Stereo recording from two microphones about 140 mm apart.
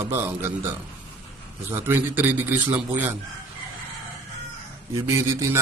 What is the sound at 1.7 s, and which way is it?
A man's voice, 15° right (ahead or behind).